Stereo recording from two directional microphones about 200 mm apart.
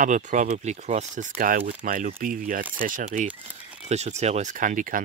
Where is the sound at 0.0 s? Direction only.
40° right (ahead or behind).